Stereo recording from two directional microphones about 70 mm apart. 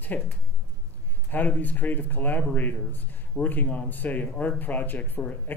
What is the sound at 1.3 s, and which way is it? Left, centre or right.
Speech, left.